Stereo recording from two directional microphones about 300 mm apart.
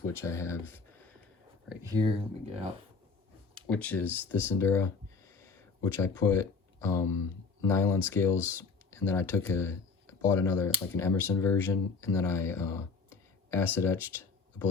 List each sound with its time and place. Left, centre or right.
0.0 s speech: centre
1.7 s speech: centre
3.7 s speech: centre